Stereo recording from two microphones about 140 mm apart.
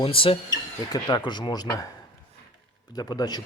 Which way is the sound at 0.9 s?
30° left (ahead or behind).